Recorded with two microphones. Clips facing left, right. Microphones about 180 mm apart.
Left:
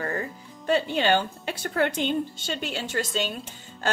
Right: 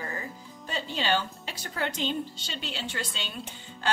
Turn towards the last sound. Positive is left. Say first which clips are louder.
# left 8 dB
turn(degrees=45)  # may be behind; listen again after turning